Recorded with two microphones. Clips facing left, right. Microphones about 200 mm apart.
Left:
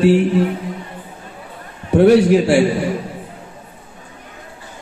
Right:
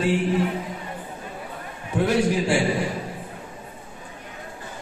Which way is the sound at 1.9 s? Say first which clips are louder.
Left 11 dB; 70° left (ahead or behind).